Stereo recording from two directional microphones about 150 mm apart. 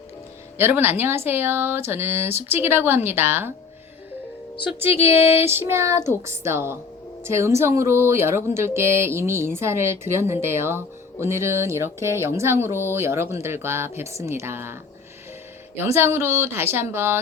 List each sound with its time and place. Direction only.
0.6 s speech: 15° right (ahead or behind)
5.4 s speech: 15° right (ahead or behind)
15.8 s speech: 15° right (ahead or behind)